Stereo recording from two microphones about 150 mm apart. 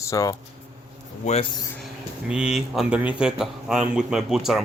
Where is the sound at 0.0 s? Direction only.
20° left (ahead or behind).